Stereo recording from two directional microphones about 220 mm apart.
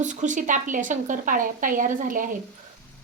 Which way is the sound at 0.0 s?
35° right (ahead or behind).